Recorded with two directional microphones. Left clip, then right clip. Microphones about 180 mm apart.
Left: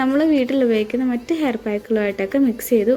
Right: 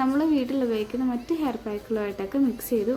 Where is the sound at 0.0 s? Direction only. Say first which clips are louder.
Left 6 dB; 20° left (ahead or behind).